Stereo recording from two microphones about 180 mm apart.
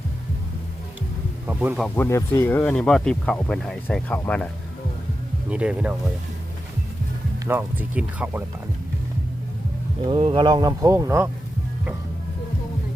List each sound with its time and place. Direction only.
1.5 s speech: 10° right (ahead or behind)
2.0 s speech: 15° left (ahead or behind)
5.5 s speech: 5° right (ahead or behind)
7.3 s speech: 10° right (ahead or behind)
10.0 s speech: 30° right (ahead or behind)